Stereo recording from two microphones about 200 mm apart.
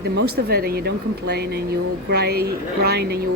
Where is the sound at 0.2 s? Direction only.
50° right (ahead or behind).